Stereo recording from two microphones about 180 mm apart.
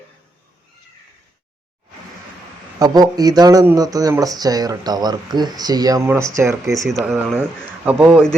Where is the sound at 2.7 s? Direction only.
20° right (ahead or behind).